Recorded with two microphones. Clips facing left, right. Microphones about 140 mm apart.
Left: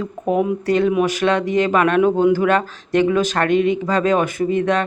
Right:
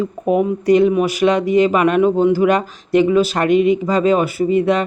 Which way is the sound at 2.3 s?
10° right (ahead or behind).